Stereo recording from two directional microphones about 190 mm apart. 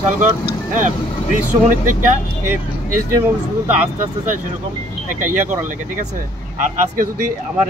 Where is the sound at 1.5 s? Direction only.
45° right (ahead or behind).